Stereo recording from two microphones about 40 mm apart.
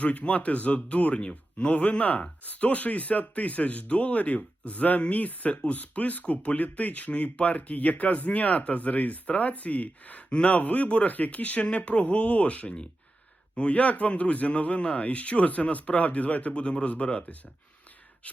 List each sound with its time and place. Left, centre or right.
0.0 s speech: left